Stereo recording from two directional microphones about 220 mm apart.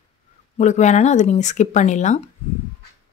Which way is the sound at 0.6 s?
30° left (ahead or behind).